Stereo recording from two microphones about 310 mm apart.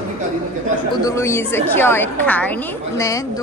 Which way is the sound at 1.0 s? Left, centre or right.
Centre.